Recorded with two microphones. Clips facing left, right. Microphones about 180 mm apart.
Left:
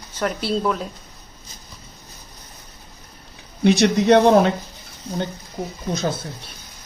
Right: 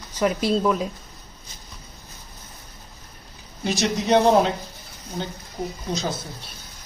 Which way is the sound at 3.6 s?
60° left (ahead or behind).